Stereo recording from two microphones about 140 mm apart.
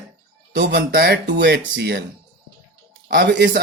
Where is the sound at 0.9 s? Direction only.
90° right.